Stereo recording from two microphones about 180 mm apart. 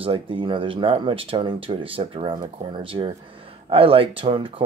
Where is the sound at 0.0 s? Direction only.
30° right (ahead or behind).